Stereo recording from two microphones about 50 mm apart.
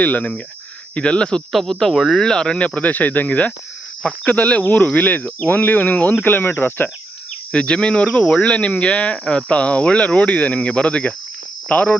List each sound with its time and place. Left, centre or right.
0.0 s speech: left
1.5 s speech: centre; by 6.9 s left
7.5 s speech: left